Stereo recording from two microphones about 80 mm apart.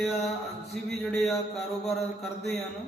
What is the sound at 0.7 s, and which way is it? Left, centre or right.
A man's voice, centre.